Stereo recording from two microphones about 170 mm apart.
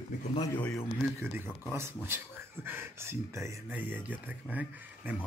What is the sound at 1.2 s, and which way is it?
Speech, 15° right (ahead or behind).